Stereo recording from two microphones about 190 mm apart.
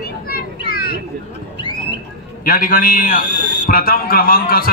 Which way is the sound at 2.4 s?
50° left (ahead or behind).